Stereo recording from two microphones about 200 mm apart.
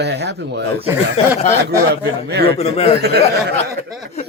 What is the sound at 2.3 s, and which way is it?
Speech, 55° right (ahead or behind).